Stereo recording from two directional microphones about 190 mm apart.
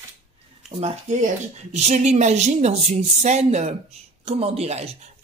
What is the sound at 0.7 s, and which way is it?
Speech, 35° right (ahead or behind).